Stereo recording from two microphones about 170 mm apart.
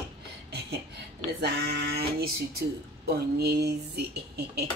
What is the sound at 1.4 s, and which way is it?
Speech, 70° right (ahead or behind).